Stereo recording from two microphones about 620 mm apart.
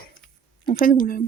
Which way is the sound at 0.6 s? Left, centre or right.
Centre.